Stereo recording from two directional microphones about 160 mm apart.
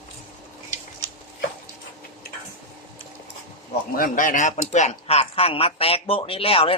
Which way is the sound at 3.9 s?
60° left (ahead or behind).